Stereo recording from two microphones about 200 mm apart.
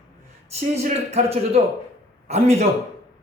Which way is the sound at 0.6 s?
30° right (ahead or behind).